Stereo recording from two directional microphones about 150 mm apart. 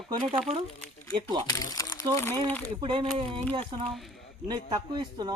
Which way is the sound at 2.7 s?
35° right (ahead or behind).